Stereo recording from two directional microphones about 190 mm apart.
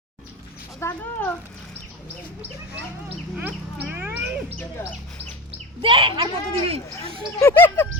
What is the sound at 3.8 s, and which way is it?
Cat, 10° right (ahead or behind).